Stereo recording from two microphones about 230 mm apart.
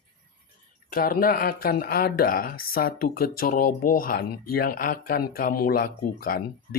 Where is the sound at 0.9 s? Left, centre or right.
Left.